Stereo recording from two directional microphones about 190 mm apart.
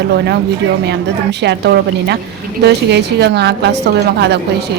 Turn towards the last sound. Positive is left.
turn(degrees=-60)  # may be behind; listen again after turning